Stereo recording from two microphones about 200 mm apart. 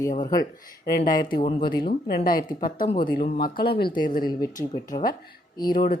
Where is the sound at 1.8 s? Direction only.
50° left (ahead or behind).